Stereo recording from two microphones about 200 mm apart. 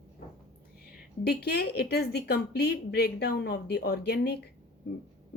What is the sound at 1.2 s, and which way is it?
Speech, 50° left (ahead or behind).